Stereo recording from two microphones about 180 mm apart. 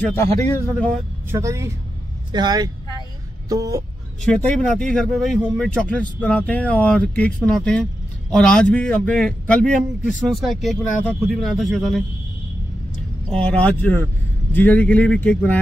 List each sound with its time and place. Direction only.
0.0 s a man's voice: 10° left (ahead or behind)
1.3 s speech: 15° right (ahead or behind)
4.2 s speech: 10° left (ahead or behind)
13.3 s a man's voice: 5° left (ahead or behind)